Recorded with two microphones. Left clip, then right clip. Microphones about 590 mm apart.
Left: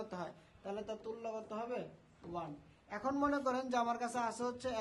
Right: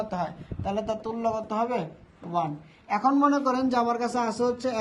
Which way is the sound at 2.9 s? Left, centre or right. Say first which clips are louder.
Right 14 dB; centre.